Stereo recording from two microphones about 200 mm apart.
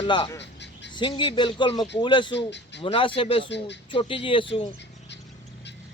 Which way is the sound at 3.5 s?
60° left (ahead or behind).